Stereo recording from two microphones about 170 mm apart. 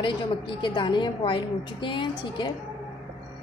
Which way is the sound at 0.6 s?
30° left (ahead or behind).